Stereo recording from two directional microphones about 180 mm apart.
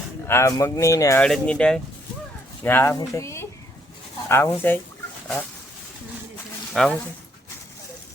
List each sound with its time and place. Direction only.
0.3 s speech: 15° left (ahead or behind)
1.2 s speech: 5° left (ahead or behind)
6.8 s speech: 5° left (ahead or behind)